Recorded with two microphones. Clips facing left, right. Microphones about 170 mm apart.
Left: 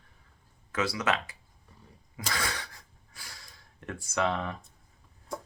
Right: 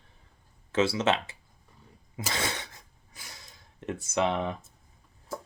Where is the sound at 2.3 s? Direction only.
25° right (ahead or behind).